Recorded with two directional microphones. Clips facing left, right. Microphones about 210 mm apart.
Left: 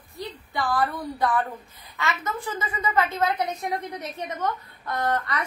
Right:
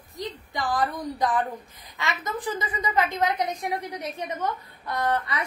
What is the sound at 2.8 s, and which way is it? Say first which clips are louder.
A woman's voice: left 1 dB; 15° right (ahead or behind).